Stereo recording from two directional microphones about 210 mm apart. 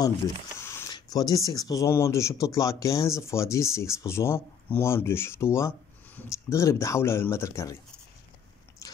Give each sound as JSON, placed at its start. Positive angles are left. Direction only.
{"t": 0.6, "sound": "speech", "side_deg": 15}